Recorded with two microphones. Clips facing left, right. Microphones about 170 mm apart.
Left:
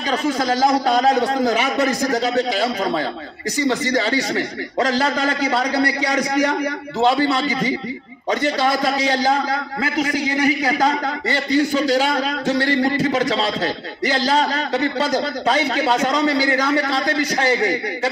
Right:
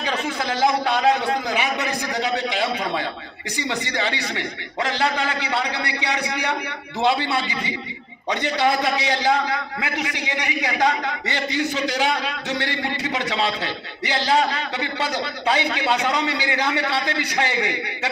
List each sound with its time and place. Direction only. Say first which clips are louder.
0.1 s a man's voice: left 7 dB; 40° left (ahead or behind)